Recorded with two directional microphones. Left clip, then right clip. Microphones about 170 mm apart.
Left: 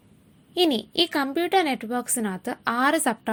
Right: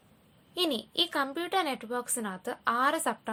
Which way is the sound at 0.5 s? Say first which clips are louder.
Left 7 dB; 20° left (ahead or behind).